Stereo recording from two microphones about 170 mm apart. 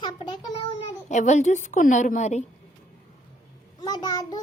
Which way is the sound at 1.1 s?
45° left (ahead or behind).